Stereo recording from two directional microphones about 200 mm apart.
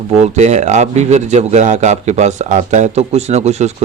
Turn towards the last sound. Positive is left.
turn(degrees=-35)  # may be behind; listen again after turning